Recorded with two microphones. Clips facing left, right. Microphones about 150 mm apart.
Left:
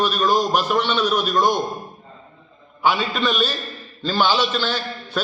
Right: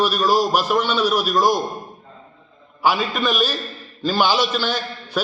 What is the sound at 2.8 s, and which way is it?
A man's voice, 10° right (ahead or behind).